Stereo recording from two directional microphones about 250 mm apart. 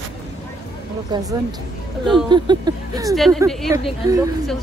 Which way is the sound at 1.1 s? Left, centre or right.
Centre.